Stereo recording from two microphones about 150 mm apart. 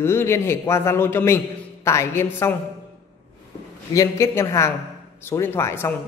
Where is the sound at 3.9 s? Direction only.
20° left (ahead or behind).